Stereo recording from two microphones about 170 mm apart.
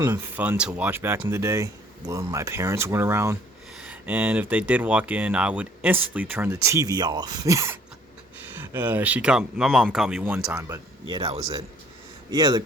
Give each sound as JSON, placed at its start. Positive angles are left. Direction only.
{"t": 0.0, "sound": "speech", "side_deg": -15}
{"t": 10.7, "sound": "speech", "side_deg": -30}
{"t": 12.3, "sound": "speech", "side_deg": -20}